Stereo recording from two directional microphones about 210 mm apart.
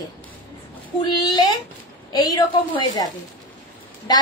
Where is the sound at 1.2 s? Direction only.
20° left (ahead or behind).